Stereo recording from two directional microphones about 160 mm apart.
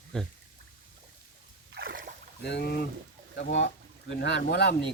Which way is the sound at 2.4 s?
90° left.